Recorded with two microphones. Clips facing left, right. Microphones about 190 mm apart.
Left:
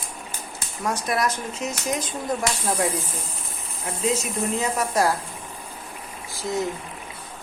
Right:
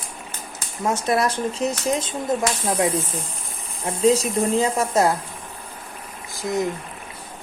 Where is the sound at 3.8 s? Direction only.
30° right (ahead or behind).